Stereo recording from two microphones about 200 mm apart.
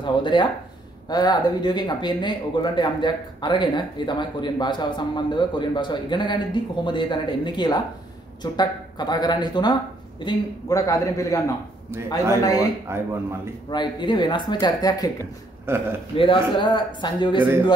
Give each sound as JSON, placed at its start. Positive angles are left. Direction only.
{"t": 0.0, "sound": "a man's voice", "side_deg": 25}
{"t": 12.9, "sound": "speech", "side_deg": -10}
{"t": 13.7, "sound": "speech", "side_deg": 20}
{"t": 15.7, "sound": "speech", "side_deg": -10}
{"t": 16.2, "sound": "speech", "side_deg": 25}